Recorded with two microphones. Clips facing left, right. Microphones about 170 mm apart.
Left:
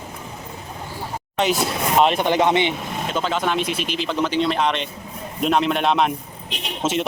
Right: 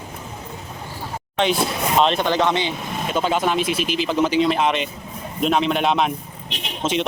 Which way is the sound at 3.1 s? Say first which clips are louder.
Right 2 dB; 10° right (ahead or behind).